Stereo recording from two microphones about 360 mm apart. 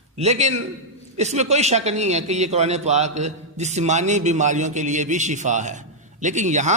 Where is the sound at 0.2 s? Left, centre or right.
Centre.